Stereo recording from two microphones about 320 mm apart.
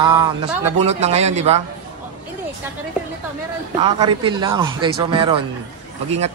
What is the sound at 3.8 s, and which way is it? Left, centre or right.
Speech, centre.